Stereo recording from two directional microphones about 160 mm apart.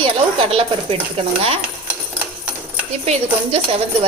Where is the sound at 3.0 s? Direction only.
40° right (ahead or behind).